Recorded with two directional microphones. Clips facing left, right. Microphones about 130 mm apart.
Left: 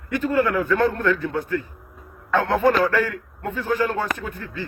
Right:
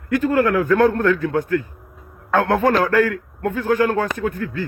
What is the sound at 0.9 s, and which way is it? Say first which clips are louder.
A man's voice: right 4 dB; 50° right (ahead or behind).